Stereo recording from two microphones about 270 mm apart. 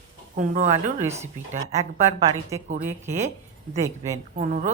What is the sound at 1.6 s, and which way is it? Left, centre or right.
Speech, right.